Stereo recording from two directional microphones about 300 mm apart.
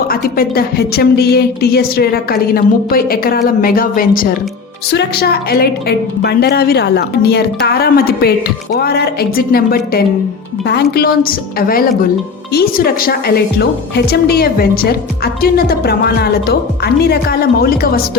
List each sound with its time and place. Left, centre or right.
0.1 s a woman's voice: left